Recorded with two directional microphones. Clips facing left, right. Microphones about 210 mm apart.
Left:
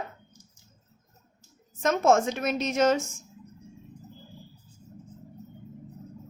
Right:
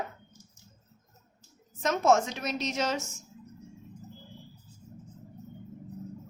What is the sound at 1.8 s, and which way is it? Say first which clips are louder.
Female singing: left 3 dB; 50° left (ahead or behind).